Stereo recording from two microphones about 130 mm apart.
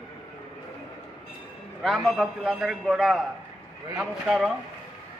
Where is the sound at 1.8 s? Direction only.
Centre (ahead or behind).